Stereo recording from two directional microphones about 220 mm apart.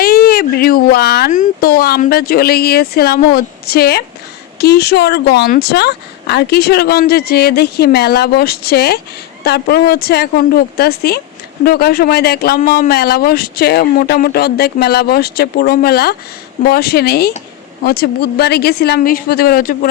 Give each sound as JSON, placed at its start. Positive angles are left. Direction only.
{"t": 0.0, "sound": "speech", "side_deg": 45}